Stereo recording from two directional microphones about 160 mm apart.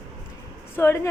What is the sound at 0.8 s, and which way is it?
Speech, 15° left (ahead or behind).